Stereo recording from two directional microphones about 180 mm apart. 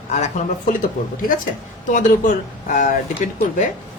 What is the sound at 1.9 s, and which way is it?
Speech, 45° left (ahead or behind).